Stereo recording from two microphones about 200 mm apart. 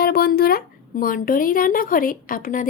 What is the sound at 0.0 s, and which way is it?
Speech, 50° left (ahead or behind).